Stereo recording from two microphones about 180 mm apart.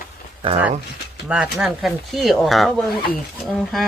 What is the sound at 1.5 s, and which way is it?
Speech, centre (ahead or behind).